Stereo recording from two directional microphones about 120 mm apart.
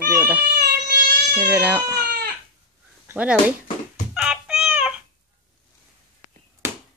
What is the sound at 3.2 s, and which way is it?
Speech, 10° right (ahead or behind).